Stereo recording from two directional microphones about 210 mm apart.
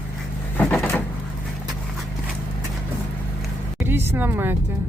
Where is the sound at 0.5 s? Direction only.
5° left (ahead or behind).